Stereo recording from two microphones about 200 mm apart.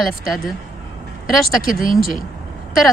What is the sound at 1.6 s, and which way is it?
Speech, 45° left (ahead or behind).